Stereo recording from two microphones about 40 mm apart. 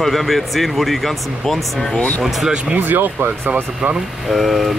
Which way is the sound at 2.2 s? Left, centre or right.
Centre.